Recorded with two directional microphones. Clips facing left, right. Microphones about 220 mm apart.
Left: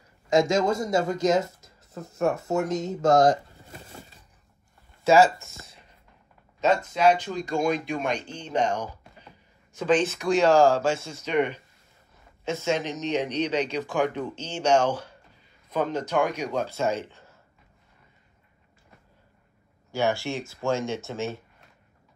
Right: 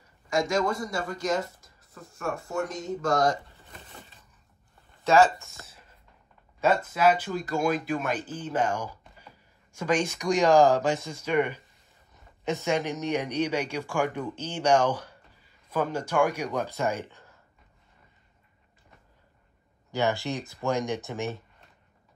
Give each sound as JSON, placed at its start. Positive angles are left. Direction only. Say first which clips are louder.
{"t": 0.3, "sound": "a man's voice", "louder": "left 4 dB", "side_deg": 20}
{"t": 3.6, "sound": "a sound", "louder": "left 4 dB", "side_deg": 40}
{"t": 6.6, "sound": "speech", "louder": "left 2 dB", "side_deg": -5}
{"t": 19.9, "sound": "speech", "louder": "left 1 dB", "side_deg": -20}